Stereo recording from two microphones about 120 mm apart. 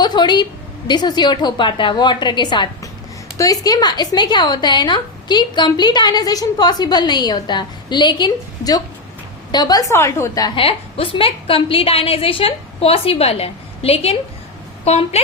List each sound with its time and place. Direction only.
0.0 s a sound: 35° left (ahead or behind)
0.9 s a woman's voice: 35° left (ahead or behind)
9.9 s a woman's voice: 20° left (ahead or behind)
10.5 s a woman's voice: 50° left (ahead or behind)